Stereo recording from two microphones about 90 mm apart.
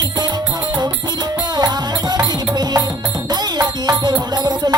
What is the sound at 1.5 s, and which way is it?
Music, 50° right (ahead or behind).